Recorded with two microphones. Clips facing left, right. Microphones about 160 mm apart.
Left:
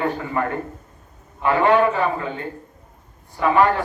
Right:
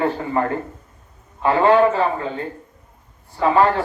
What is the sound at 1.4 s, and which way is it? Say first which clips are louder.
Speech: right 2 dB; 30° right (ahead or behind).